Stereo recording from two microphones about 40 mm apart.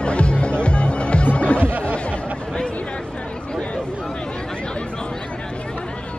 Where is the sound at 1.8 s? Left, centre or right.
Left.